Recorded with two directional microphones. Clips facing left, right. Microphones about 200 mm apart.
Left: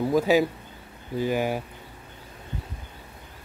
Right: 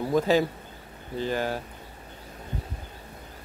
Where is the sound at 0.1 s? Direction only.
5° left (ahead or behind).